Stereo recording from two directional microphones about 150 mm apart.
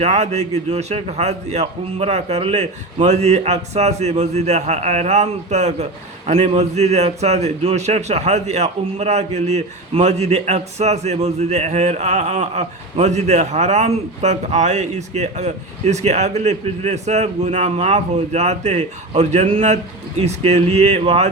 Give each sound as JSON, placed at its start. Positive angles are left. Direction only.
{"t": 0.0, "sound": "a man's voice", "side_deg": -50}